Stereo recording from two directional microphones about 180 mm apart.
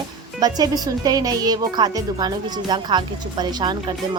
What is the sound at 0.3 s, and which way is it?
Speech, 20° right (ahead or behind).